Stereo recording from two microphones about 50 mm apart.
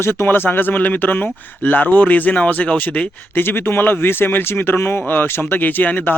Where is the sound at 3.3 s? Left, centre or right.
Left.